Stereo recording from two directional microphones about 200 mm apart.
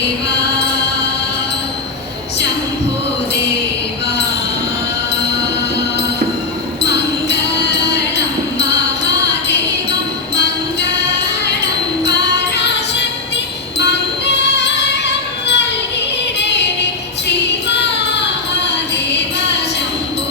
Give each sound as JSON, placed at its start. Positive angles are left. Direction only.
{"t": 6.8, "sound": "music", "side_deg": 60}
{"t": 10.3, "sound": "music", "side_deg": 60}
{"t": 14.3, "sound": "music", "side_deg": 60}